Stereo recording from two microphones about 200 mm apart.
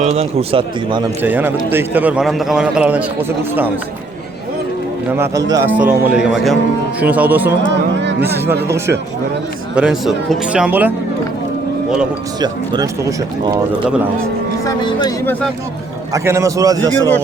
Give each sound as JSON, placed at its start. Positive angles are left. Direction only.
{"t": 0.0, "sound": "speech", "side_deg": -30}
{"t": 1.2, "sound": "a man's voice", "side_deg": -10}
{"t": 5.1, "sound": "a man's voice", "side_deg": -15}
{"t": 9.7, "sound": "speech", "side_deg": -5}
{"t": 12.4, "sound": "speech", "side_deg": -20}
{"t": 14.6, "sound": "speech", "side_deg": 20}
{"t": 16.1, "sound": "a man's voice", "side_deg": -15}